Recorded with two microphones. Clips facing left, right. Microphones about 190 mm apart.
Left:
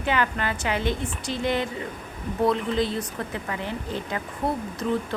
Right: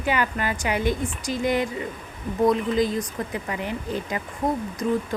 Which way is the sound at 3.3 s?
15° right (ahead or behind).